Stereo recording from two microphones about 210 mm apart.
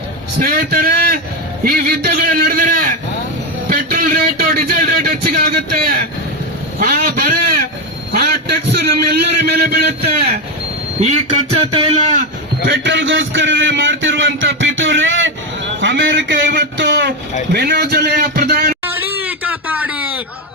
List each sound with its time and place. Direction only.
0.3 s a man's voice: 45° right (ahead or behind)
11.7 s speech: 25° right (ahead or behind)
12.6 s a man's voice: 55° right (ahead or behind)
18.9 s a sound: 10° right (ahead or behind)